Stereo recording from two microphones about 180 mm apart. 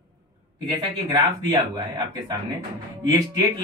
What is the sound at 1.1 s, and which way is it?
A man's voice, 25° right (ahead or behind).